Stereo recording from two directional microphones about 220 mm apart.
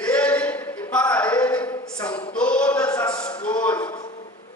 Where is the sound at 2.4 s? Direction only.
5° left (ahead or behind).